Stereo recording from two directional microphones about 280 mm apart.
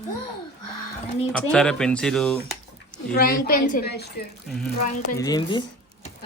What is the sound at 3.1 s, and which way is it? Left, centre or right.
Speech, left.